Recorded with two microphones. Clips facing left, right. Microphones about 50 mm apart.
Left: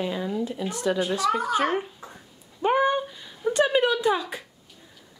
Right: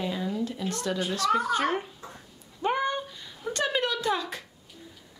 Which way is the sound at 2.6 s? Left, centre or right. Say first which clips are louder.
Left 6 dB; centre.